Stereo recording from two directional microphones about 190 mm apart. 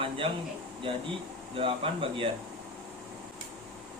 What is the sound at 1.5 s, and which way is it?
Speech, 30° right (ahead or behind).